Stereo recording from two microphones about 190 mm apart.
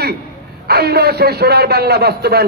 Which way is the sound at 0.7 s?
55° right (ahead or behind).